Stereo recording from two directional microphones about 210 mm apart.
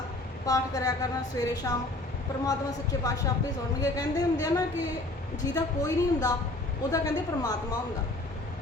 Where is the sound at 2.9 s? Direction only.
15° left (ahead or behind).